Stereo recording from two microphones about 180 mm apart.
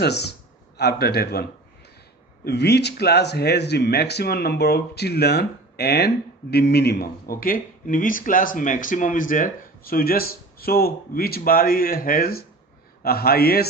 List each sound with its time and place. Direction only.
0.0 s speech: 65° left (ahead or behind)